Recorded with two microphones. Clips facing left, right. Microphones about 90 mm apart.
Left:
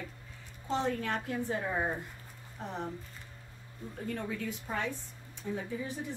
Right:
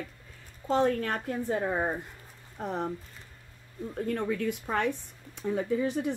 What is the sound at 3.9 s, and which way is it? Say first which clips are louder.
Speech: right 7 dB; 55° right (ahead or behind).